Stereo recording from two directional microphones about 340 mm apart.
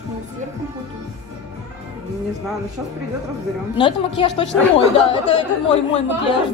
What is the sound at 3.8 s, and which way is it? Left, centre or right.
Speech, centre.